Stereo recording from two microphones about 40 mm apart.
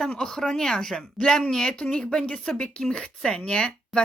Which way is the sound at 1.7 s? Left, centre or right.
Left.